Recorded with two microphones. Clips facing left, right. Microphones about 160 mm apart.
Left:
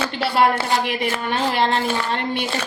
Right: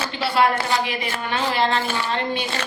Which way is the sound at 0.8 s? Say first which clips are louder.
Left 4 dB; 50° left (ahead or behind).